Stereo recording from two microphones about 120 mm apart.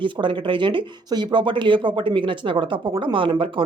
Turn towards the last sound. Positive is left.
turn(degrees=-50)  # may be behind; listen again after turning